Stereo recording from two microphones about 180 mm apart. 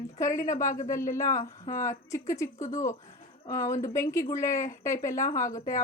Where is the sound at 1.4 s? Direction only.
40° left (ahead or behind).